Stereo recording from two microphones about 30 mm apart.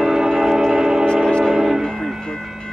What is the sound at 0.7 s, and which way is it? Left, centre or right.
Music, right.